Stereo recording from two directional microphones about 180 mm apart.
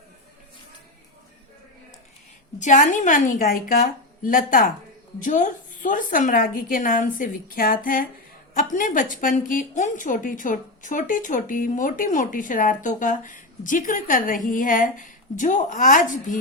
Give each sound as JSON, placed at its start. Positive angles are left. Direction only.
{"t": 2.6, "sound": "a woman's voice", "side_deg": 45}